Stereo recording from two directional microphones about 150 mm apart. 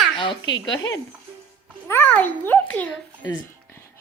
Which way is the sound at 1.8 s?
15° left (ahead or behind).